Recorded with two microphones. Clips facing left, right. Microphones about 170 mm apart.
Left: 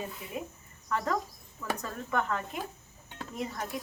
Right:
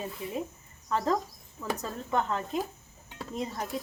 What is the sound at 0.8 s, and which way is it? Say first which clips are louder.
Speech: right 3 dB; 25° right (ahead or behind).